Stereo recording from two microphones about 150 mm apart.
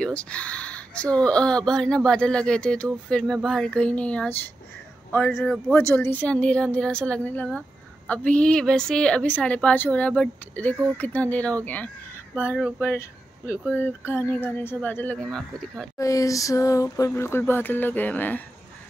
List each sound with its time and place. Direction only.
0.0 s speech: 10° left (ahead or behind)
16.0 s speech: 20° left (ahead or behind)